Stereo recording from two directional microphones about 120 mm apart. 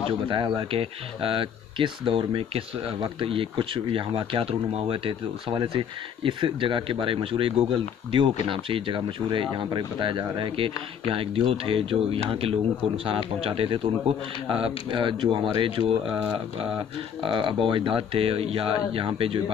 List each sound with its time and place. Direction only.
0.3 s speech: 40° right (ahead or behind)
17.2 s speech: 45° right (ahead or behind)